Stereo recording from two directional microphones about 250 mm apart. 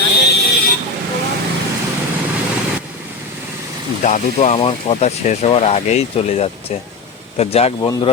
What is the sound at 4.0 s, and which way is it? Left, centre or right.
Speech, left.